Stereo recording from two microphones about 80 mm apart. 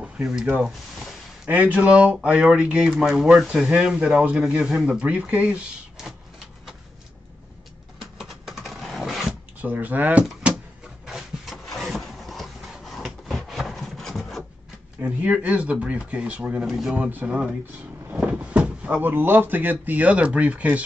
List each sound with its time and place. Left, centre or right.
0.0 s speech: centre
8.2 s a sound: centre
9.6 s speech: right
10.4 s a sound: centre
11.1 s wood: centre
15.0 s speech: centre
16.6 s speech: centre
16.9 s speech: right